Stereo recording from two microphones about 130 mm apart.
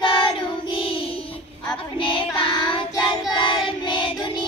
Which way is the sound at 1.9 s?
40° left (ahead or behind).